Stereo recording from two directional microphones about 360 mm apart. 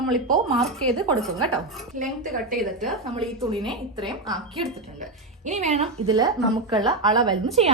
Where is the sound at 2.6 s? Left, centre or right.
Centre.